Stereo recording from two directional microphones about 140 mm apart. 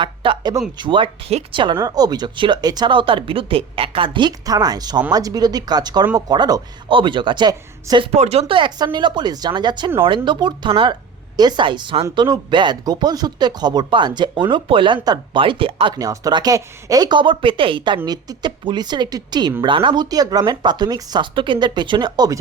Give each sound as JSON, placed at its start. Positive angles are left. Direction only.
{"t": 0.0, "sound": "speech", "side_deg": -35}
{"t": 1.6, "sound": "speech", "side_deg": -30}
{"t": 8.1, "sound": "speech", "side_deg": -50}
{"t": 16.0, "sound": "speech", "side_deg": -25}